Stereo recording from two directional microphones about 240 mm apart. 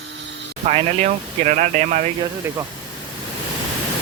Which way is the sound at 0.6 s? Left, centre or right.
Right.